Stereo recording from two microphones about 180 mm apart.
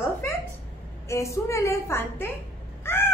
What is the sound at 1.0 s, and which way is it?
A woman's voice, 15° left (ahead or behind).